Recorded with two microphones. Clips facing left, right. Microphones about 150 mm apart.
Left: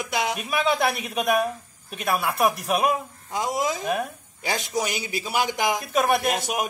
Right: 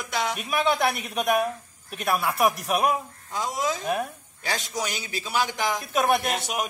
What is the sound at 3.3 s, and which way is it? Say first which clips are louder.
Speech: left 2 dB; 15° left (ahead or behind).